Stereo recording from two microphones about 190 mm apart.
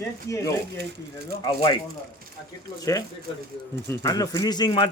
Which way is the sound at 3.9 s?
20° left (ahead or behind).